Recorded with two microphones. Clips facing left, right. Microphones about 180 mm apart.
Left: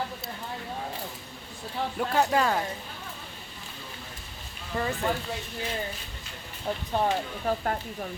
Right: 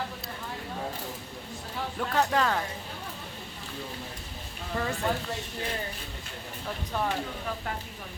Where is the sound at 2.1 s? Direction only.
10° left (ahead or behind).